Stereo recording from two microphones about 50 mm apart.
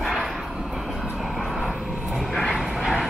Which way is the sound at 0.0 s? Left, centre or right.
Centre.